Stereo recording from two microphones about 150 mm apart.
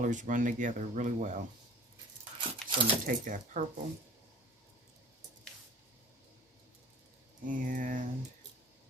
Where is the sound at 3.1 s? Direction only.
60° right (ahead or behind).